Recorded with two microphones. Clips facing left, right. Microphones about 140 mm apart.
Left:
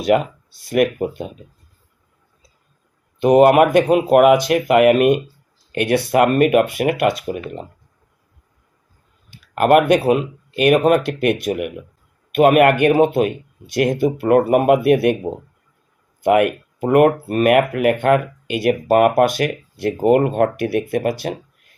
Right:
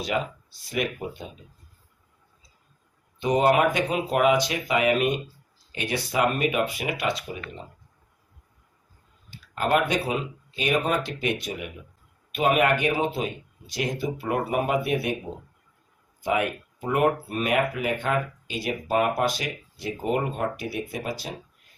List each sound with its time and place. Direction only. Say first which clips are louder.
0.0 s speech: left 11 dB; 60° left (ahead or behind)
3.2 s speech: left 10 dB; 60° left (ahead or behind)
9.3 s speech: left 10 dB; 60° left (ahead or behind)